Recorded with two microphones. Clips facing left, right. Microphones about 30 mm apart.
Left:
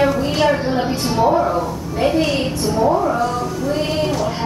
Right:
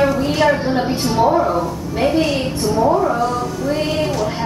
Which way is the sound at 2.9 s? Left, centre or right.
Centre.